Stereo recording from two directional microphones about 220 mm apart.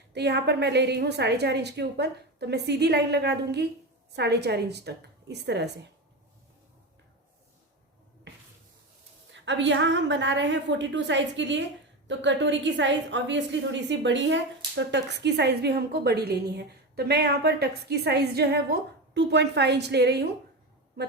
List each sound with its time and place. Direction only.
0.1 s a woman's voice: 50° right (ahead or behind)
9.3 s a woman's voice: 55° right (ahead or behind)